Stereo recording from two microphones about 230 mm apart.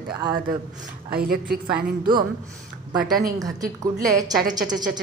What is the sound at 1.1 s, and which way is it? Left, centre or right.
Speech, right.